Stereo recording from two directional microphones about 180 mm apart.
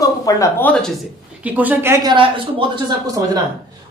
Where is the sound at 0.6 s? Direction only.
5° left (ahead or behind).